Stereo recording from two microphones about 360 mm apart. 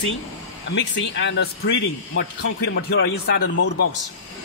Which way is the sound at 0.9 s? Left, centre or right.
Left.